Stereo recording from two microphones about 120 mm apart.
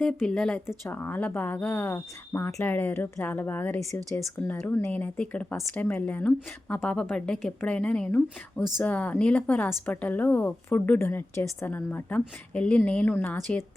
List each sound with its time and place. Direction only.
0.2 s speech: 5° left (ahead or behind)